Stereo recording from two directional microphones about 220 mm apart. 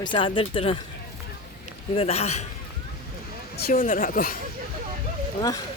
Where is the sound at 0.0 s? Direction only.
20° left (ahead or behind).